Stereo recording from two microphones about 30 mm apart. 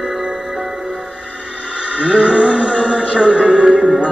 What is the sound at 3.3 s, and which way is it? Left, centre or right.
Music, right.